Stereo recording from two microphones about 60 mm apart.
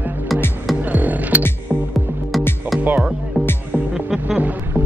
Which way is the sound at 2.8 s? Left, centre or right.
Right.